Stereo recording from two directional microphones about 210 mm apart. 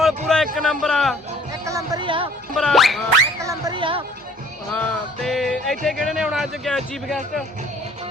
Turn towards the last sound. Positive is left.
turn(degrees=0)  # may be behind; listen again after turning